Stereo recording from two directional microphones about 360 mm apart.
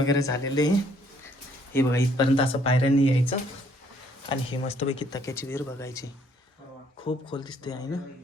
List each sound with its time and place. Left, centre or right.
0.1 s speech: centre
1.7 s speech: centre
7.3 s speech: centre